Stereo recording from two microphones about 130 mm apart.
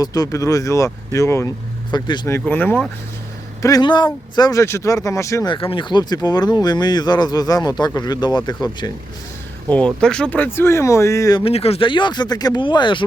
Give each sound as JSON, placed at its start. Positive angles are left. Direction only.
{"t": 0.0, "sound": "speech", "side_deg": 30}
{"t": 1.9, "sound": "speech", "side_deg": 35}
{"t": 2.2, "sound": "speech", "side_deg": 15}
{"t": 3.6, "sound": "speech", "side_deg": 30}
{"t": 5.5, "sound": "speech", "side_deg": 40}
{"t": 9.7, "sound": "speech", "side_deg": 5}
{"t": 11.4, "sound": "speech", "side_deg": 50}